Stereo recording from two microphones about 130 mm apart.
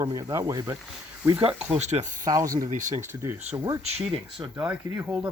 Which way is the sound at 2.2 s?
25° right (ahead or behind).